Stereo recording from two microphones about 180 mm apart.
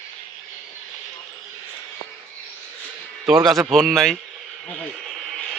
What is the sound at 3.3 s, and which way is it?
Speech, 5° right (ahead or behind).